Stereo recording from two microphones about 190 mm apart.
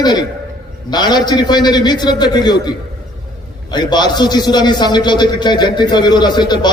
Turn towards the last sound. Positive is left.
turn(degrees=25)  # may be behind; listen again after turning